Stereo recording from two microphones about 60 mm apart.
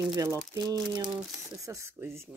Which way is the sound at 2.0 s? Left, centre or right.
Right.